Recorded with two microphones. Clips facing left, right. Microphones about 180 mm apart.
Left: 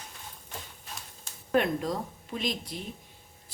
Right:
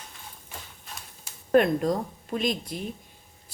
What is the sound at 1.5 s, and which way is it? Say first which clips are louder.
Speech: right 6 dB; 45° right (ahead or behind).